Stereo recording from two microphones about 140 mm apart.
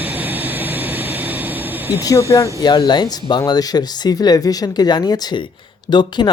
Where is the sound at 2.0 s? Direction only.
25° left (ahead or behind).